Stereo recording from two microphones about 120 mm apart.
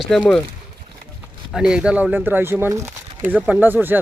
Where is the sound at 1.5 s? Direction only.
5° right (ahead or behind).